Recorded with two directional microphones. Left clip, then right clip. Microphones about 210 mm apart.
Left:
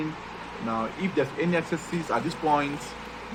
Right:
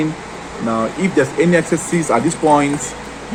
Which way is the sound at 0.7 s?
15° right (ahead or behind).